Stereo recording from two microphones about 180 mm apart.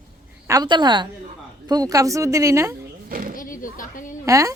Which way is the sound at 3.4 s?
50° left (ahead or behind).